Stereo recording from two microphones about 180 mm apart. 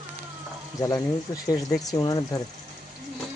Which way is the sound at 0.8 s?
20° left (ahead or behind).